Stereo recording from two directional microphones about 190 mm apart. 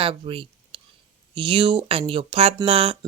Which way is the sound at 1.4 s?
25° right (ahead or behind).